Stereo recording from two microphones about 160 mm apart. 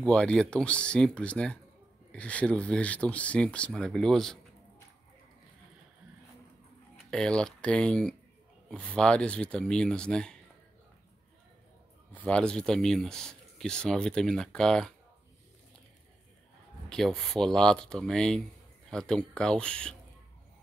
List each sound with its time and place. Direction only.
0.0 s speech: 5° left (ahead or behind)
7.1 s speech: 5° left (ahead or behind)
12.1 s speech: 10° left (ahead or behind)
16.9 s speech: centre (ahead or behind)